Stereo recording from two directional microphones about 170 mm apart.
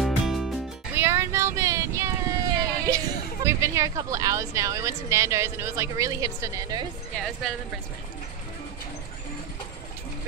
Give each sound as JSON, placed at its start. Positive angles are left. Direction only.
{"t": 0.0, "sound": "music", "side_deg": 0}
{"t": 0.9, "sound": "a sound", "side_deg": -15}
{"t": 3.4, "sound": "speech", "side_deg": -15}